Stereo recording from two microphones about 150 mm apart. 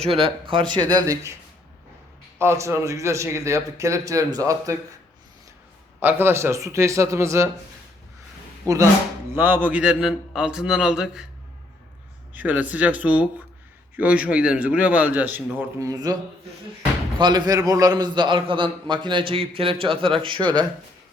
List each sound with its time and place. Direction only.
0.0 s a man's voice: 40° right (ahead or behind); by 1.4 s 20° right (ahead or behind)
2.4 s a man's voice: 20° right (ahead or behind)
6.0 s a man's voice: 15° right (ahead or behind)
8.6 s a man's voice: 20° right (ahead or behind); by 11.3 s 5° right (ahead or behind)
12.3 s a man's voice: 10° right (ahead or behind)
15.8 s a man's voice: 25° right (ahead or behind)
17.2 s a man's voice: 30° right (ahead or behind)